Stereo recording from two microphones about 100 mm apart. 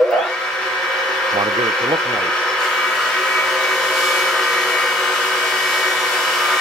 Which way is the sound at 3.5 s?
5° left (ahead or behind).